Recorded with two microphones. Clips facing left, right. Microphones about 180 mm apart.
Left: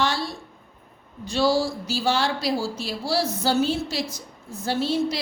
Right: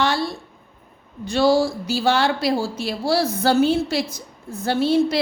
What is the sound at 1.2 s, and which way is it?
Speech, 60° right (ahead or behind).